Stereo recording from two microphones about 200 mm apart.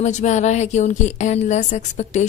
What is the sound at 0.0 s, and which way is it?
A woman's voice, 35° left (ahead or behind).